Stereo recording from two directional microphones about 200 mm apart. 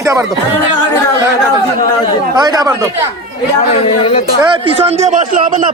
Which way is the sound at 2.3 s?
20° right (ahead or behind).